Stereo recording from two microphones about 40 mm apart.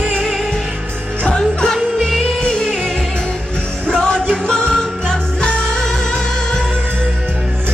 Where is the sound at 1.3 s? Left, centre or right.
Centre.